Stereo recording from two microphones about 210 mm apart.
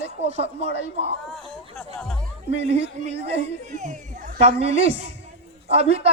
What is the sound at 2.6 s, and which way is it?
A man's voice, 30° right (ahead or behind).